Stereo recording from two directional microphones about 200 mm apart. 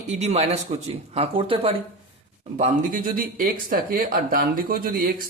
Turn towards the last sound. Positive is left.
turn(degrees=-45)  # may be behind; listen again after turning